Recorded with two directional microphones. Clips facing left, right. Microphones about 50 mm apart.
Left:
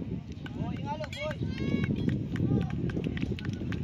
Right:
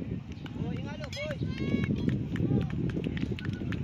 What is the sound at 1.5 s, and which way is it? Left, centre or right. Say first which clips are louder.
Run: right 1 dB; centre.